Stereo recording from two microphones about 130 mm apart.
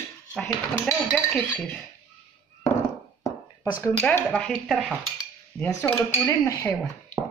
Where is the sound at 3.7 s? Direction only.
15° left (ahead or behind); by 4.9 s centre (ahead or behind).